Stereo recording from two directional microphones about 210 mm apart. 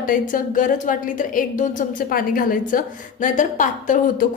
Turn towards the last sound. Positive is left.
turn(degrees=40)  # may be behind; listen again after turning